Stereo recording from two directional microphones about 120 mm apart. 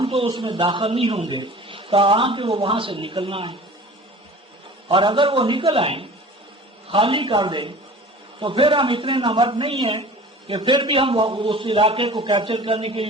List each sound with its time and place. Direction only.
0.0 s a sound: 50° right (ahead or behind)
0.3 s a man's voice: 40° right (ahead or behind)
4.9 s a man's voice: 45° right (ahead or behind)